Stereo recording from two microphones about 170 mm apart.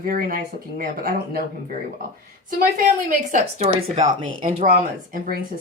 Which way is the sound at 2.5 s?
60° right (ahead or behind).